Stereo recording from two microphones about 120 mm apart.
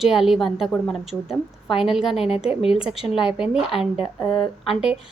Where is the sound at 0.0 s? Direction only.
5° right (ahead or behind).